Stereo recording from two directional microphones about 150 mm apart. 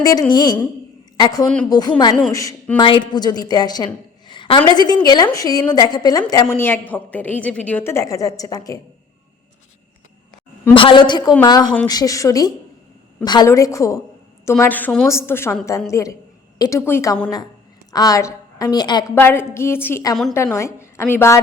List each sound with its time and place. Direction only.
0.0 s a woman's voice: 25° left (ahead or behind)
2.7 s a woman's voice: 30° left (ahead or behind)
10.8 s a woman's voice: 35° left (ahead or behind)
19.1 s a woman's voice: 15° left (ahead or behind)